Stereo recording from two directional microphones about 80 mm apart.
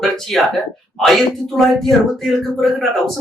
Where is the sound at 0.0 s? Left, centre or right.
Centre.